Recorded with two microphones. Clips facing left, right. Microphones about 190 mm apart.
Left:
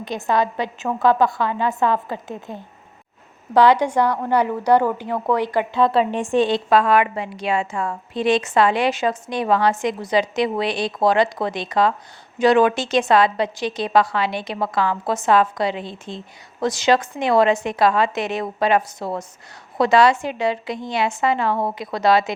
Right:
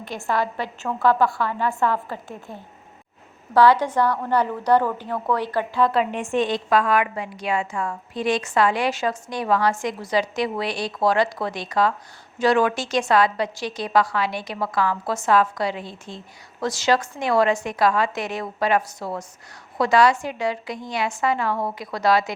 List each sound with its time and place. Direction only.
0.0 s a woman's voice: 20° left (ahead or behind)